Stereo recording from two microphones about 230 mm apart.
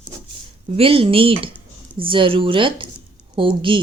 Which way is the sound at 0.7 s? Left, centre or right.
Right.